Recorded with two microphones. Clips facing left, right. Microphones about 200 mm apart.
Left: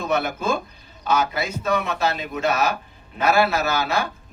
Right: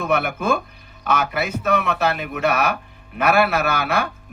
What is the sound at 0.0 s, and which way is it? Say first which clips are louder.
A man's voice: right 2 dB; 60° right (ahead or behind).